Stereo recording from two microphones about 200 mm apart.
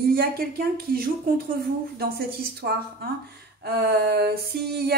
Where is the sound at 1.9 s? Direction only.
50° right (ahead or behind).